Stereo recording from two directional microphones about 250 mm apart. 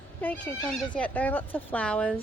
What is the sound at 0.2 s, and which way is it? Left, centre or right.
Speech, centre.